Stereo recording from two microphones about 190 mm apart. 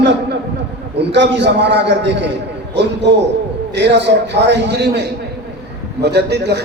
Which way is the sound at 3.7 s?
65° right (ahead or behind).